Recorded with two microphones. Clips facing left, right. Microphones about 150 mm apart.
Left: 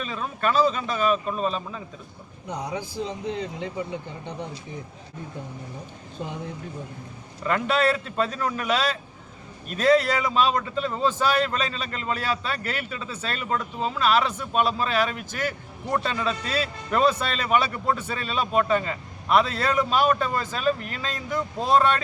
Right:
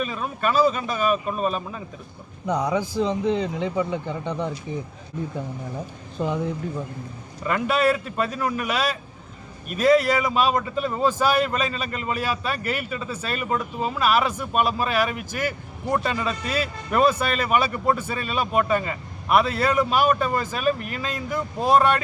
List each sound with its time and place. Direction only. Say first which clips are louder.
0.0 s a man's voice: right 2 dB; 10° right (ahead or behind)
2.5 s speech: right 8 dB; 90° right
6.1 s speech: right 8 dB; 90° right
7.4 s a man's voice: right 1 dB; 10° right (ahead or behind)